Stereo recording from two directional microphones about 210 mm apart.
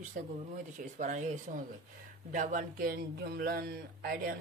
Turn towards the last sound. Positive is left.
turn(degrees=-45)  # may be behind; listen again after turning